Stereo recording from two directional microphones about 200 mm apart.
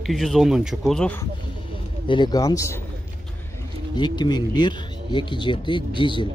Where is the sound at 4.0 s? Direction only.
20° left (ahead or behind).